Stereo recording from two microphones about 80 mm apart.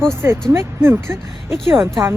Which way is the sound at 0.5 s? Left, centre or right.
Right.